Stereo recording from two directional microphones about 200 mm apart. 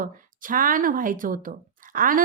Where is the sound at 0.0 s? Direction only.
45° right (ahead or behind).